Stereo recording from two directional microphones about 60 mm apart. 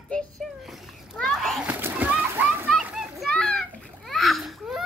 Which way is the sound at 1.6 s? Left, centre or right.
Right.